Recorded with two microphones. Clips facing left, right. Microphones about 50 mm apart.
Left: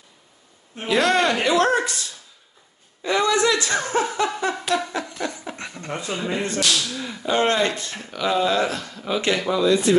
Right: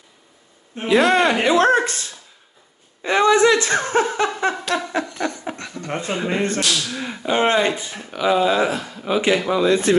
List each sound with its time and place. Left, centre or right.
0.7 s speech: centre
1.6 s speech: right
4.9 s a sound: right
5.9 s speech: right; by 9.6 s centre
9.6 s speech: right